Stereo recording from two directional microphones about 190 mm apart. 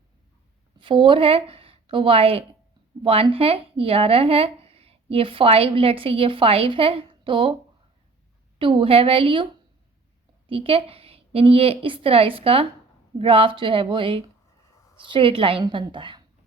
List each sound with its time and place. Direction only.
0.8 s a woman's voice: 25° right (ahead or behind)
8.5 s speech: 25° right (ahead or behind)